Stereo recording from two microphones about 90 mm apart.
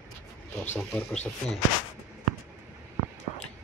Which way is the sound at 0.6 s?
25° left (ahead or behind).